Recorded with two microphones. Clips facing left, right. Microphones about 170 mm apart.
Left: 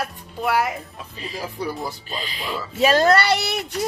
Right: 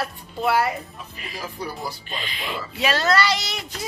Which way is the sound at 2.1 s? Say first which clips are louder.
Left 2 dB; 40° left (ahead or behind).